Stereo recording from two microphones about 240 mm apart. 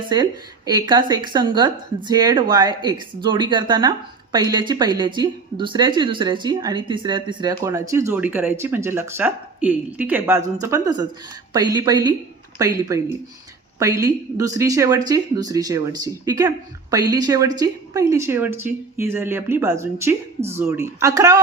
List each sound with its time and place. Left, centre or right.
0.1 s speech: centre